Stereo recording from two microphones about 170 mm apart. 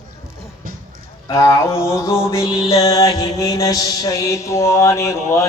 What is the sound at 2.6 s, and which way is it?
Music, 20° left (ahead or behind).